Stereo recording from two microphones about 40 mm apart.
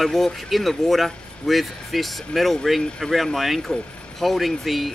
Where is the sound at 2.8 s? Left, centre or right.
Centre.